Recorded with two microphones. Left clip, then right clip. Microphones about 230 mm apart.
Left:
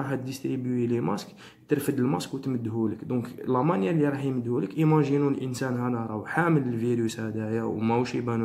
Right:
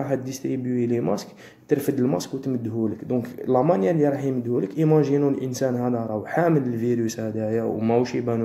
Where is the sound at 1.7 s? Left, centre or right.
Centre.